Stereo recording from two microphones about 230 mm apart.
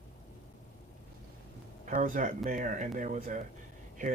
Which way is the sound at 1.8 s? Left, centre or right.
Right.